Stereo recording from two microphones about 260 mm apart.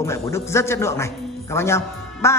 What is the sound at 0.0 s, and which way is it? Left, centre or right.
A woman's voice, centre.